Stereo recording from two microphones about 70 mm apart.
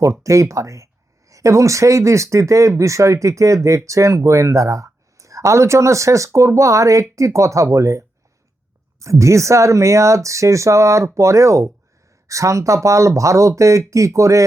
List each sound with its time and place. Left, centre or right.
0.0 s speech: right